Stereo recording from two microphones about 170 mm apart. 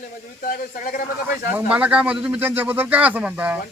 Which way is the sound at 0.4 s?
55° left (ahead or behind).